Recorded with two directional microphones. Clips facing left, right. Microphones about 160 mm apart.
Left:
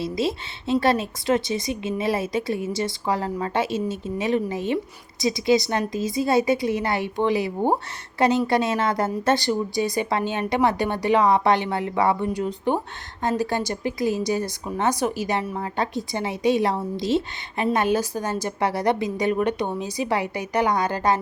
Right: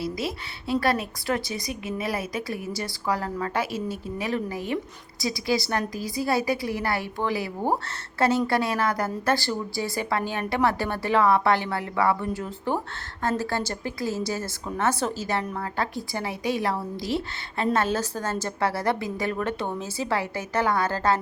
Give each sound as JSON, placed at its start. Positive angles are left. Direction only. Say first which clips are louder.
{"t": 0.0, "sound": "a woman's voice", "louder": "left 5 dB", "side_deg": 25}